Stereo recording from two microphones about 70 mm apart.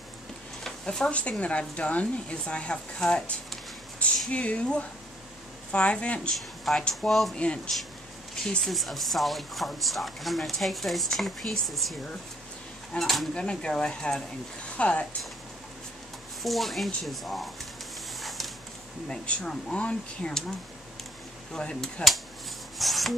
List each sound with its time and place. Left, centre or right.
0.7 s speech: centre
6.3 s speech: centre
7.3 s speech: centre
13.0 s speech: centre
13.3 s speech: centre
16.4 s speech: centre
19.0 s speech: centre
21.5 s speech: centre
22.8 s a sound: centre